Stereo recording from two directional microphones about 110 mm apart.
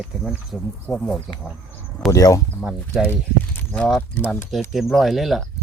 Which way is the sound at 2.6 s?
5° right (ahead or behind).